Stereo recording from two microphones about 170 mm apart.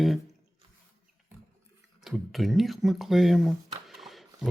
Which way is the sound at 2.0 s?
Centre (ahead or behind).